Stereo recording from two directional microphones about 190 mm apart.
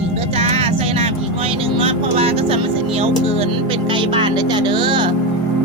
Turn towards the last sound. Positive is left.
turn(degrees=-25)  # may be behind; listen again after turning